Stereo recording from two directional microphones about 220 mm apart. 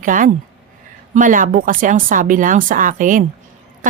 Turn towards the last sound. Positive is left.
turn(degrees=-35)  # may be behind; listen again after turning